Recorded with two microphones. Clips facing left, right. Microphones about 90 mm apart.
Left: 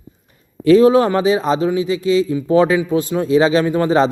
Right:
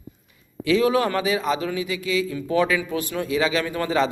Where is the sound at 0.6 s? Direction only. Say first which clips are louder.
Left 10 dB; 40° left (ahead or behind).